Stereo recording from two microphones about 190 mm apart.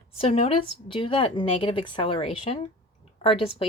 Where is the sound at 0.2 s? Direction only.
30° left (ahead or behind).